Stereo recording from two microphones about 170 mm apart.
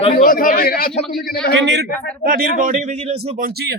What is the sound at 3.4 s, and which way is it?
Speech, 65° right (ahead or behind).